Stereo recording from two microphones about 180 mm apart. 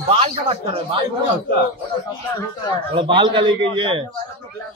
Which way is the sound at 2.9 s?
30° right (ahead or behind).